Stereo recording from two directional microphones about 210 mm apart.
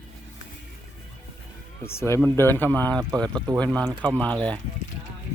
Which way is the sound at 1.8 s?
10° left (ahead or behind).